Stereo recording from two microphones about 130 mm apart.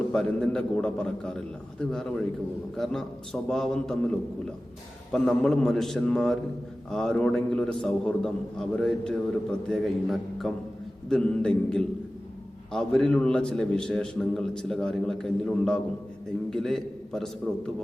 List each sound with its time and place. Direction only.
0.1 s a man's voice: 5° left (ahead or behind)
5.1 s a man's voice: 5° left (ahead or behind)